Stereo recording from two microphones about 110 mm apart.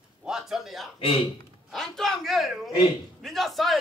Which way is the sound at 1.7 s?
5° left (ahead or behind).